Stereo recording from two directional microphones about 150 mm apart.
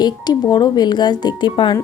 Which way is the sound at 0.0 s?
30° left (ahead or behind).